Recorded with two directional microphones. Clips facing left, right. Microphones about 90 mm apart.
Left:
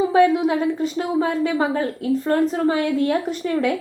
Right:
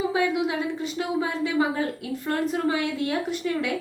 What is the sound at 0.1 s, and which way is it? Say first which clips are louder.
A woman's voice: left 8 dB; 45° left (ahead or behind).